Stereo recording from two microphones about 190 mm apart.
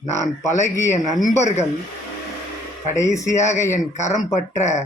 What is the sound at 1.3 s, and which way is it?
Speech, 35° left (ahead or behind).